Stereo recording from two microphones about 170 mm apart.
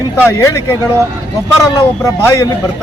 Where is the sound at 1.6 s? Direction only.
20° left (ahead or behind).